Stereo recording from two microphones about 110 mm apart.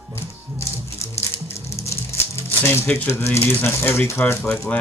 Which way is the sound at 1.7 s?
25° left (ahead or behind).